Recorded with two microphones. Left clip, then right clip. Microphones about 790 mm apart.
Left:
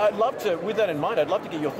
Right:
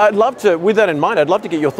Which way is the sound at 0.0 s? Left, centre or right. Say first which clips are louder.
Right 10 dB; right.